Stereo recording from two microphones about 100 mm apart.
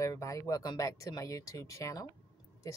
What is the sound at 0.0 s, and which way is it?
Speech, 35° left (ahead or behind).